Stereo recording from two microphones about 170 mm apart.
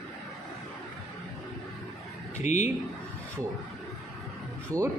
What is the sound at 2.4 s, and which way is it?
Speech, 45° left (ahead or behind).